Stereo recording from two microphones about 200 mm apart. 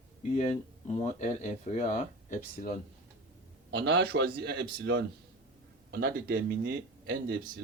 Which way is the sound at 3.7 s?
60° right (ahead or behind).